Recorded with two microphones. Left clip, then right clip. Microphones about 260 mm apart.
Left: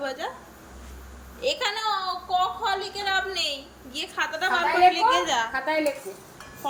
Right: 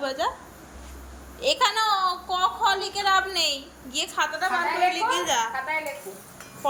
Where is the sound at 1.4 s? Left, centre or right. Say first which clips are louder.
Right 4 dB; centre.